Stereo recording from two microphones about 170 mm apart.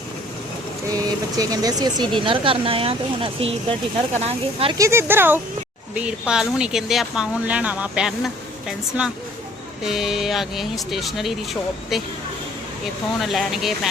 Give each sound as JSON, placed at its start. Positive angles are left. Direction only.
{"t": 0.9, "sound": "speech", "side_deg": -20}
{"t": 4.8, "sound": "speech", "side_deg": -15}
{"t": 13.1, "sound": "speech", "side_deg": 0}